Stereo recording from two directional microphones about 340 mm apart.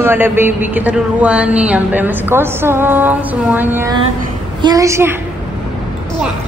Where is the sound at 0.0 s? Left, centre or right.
Centre.